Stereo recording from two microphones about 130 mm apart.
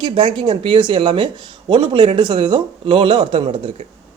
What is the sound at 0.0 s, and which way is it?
Speech, 40° right (ahead or behind).